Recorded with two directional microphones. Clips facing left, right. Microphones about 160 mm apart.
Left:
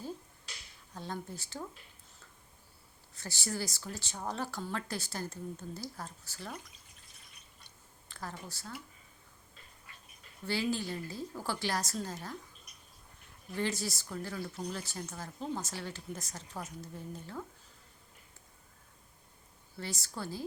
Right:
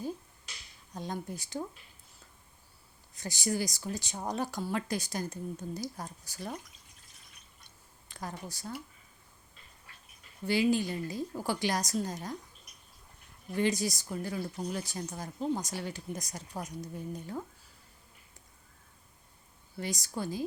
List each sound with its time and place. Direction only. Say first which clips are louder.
0.9 s speech: right 3 dB; 15° right (ahead or behind)
3.2 s speech: right 5 dB; 15° right (ahead or behind)
8.0 s speech: right 3 dB; 15° right (ahead or behind)
10.4 s speech: right 6 dB; 15° right (ahead or behind)
13.6 s speech: right 5 dB; 15° right (ahead or behind)
19.8 s speech: right 5 dB; 15° right (ahead or behind)